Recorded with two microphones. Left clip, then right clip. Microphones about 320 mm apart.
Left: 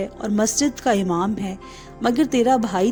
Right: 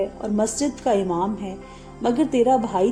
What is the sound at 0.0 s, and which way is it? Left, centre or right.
A woman's voice, left.